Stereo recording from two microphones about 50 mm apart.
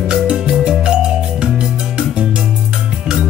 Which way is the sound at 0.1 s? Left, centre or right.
Centre.